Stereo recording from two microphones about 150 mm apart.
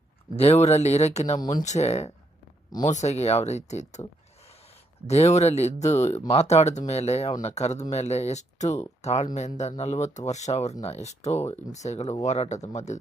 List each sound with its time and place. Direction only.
0.3 s speech: 45° left (ahead or behind)
5.0 s speech: 45° left (ahead or behind)